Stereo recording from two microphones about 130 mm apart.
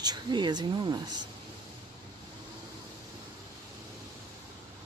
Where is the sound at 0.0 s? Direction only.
35° right (ahead or behind).